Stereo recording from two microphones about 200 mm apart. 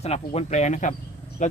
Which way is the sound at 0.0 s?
30° left (ahead or behind).